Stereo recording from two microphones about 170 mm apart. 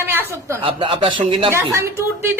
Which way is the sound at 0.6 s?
30° right (ahead or behind).